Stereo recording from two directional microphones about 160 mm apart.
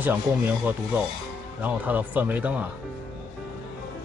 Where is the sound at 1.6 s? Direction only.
10° right (ahead or behind).